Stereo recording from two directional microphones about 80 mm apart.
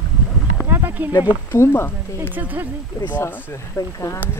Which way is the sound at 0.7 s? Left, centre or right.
Right.